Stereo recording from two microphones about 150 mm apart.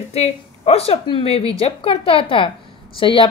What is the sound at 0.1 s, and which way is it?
A woman's voice, 40° left (ahead or behind).